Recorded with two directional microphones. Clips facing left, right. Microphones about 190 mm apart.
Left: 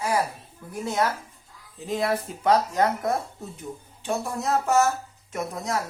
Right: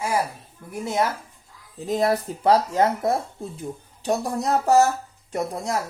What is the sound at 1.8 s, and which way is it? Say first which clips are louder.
Speech: right 4 dB; 40° right (ahead or behind).